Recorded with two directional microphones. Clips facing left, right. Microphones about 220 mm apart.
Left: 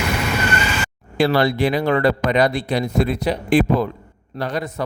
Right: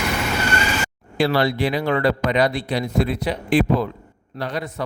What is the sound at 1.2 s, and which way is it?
A man's voice, 45° left (ahead or behind).